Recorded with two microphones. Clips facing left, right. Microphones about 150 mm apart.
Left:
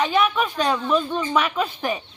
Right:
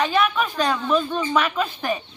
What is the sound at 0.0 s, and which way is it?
A woman's voice, 10° left (ahead or behind).